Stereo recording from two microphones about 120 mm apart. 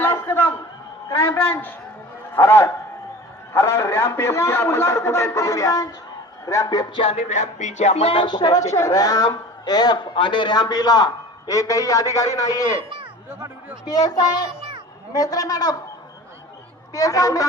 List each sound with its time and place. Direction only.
0.0 s a sound: 20° left (ahead or behind)
1.1 s a man's voice: 20° left (ahead or behind)
7.0 s music: 65° left (ahead or behind)
8.1 s a man's voice: 40° left (ahead or behind)
13.8 s a man's voice: 35° left (ahead or behind)
16.9 s a man's voice: 30° left (ahead or behind)